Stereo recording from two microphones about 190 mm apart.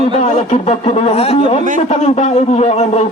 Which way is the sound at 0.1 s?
35° left (ahead or behind).